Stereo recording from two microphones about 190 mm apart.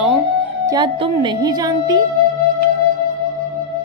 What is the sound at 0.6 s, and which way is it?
Speech, 25° right (ahead or behind).